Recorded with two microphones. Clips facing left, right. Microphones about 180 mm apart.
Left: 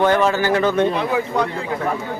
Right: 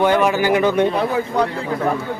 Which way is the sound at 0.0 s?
15° right (ahead or behind).